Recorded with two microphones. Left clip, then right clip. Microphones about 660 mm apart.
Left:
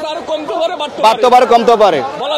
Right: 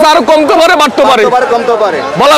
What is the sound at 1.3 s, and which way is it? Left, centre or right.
Speech, left.